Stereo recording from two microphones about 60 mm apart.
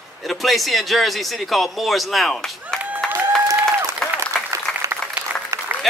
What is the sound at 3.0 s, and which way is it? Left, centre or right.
Applause, centre.